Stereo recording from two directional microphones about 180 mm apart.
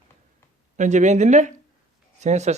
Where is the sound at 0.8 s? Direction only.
40° right (ahead or behind).